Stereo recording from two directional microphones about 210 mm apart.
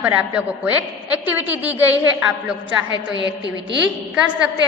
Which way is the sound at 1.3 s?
10° right (ahead or behind).